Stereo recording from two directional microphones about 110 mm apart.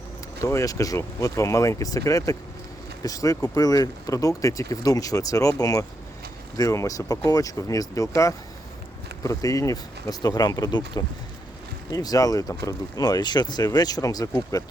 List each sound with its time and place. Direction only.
0.4 s speech: 30° left (ahead or behind)